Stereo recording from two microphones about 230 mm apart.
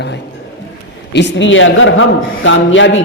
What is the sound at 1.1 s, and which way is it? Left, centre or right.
A man's voice, left.